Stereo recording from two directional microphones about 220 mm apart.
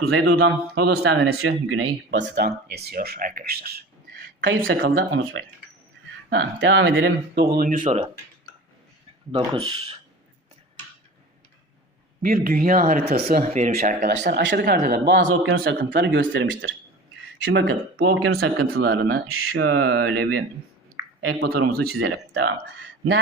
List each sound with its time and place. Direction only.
0.1 s speech: 70° right (ahead or behind)
2.0 s speech: 50° right (ahead or behind)
6.3 s speech: 55° right (ahead or behind)
7.5 s speech: 40° right (ahead or behind)
9.3 s speech: 20° right (ahead or behind)
12.2 s speech: 40° right (ahead or behind)
14.2 s speech: 50° right (ahead or behind)
15.6 s speech: 45° right (ahead or behind)
18.3 s speech: 60° right (ahead or behind)
21.0 s a sound: 10° right (ahead or behind)
21.3 s speech: 50° right (ahead or behind)